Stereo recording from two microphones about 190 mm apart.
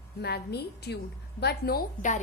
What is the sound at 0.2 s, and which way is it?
A woman's voice, 60° left (ahead or behind).